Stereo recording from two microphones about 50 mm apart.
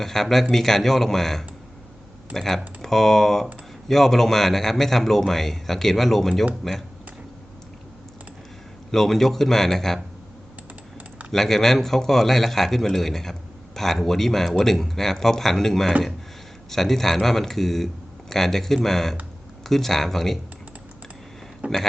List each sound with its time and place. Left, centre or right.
0.0 s speech: centre
8.9 s speech: centre
11.3 s speech: centre
21.6 s speech: right